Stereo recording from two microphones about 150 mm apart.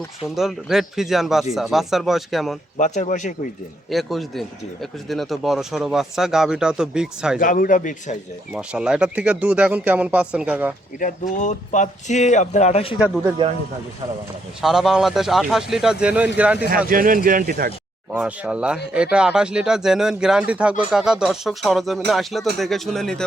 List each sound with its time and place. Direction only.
0.3 s speech: centre (ahead or behind)
2.7 s a man's voice: 55° left (ahead or behind)
3.8 s speech: centre (ahead or behind)
7.3 s a man's voice: 65° left (ahead or behind)
8.5 s speech: 5° right (ahead or behind)
11.0 s speech: 55° left (ahead or behind)
14.6 s speech: 5° right (ahead or behind)
16.6 s speech: 70° right (ahead or behind)
18.1 s speech: 10° right (ahead or behind)